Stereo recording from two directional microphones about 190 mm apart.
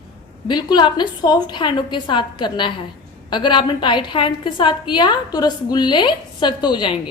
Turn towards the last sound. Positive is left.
turn(degrees=25)  # may be behind; listen again after turning